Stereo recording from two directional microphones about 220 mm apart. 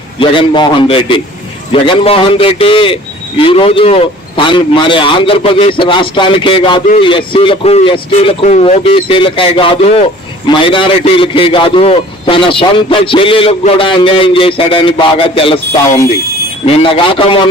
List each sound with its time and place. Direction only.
0.2 s a man's voice: 20° left (ahead or behind)
16.6 s a man's voice: 25° left (ahead or behind)